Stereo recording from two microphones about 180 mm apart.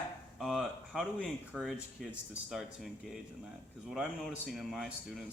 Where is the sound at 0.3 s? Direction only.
Centre (ahead or behind).